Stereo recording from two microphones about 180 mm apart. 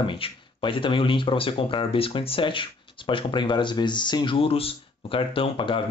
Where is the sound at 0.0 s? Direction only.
25° left (ahead or behind).